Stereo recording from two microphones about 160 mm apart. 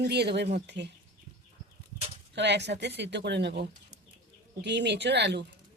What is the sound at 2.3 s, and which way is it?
Speech, 90° right.